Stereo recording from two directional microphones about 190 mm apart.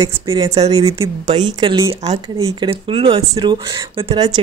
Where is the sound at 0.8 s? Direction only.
15° right (ahead or behind).